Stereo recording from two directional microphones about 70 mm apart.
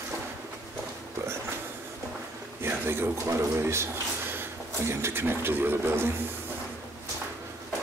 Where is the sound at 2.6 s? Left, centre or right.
Right.